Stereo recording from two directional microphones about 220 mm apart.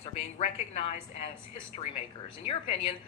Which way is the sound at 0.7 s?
30° left (ahead or behind).